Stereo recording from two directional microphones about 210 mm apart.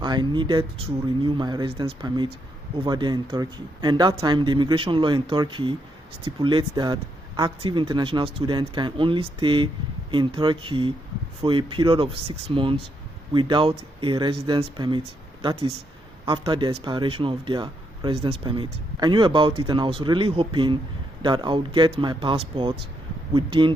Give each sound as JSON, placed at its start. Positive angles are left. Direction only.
{"t": 0.0, "sound": "speech", "side_deg": -20}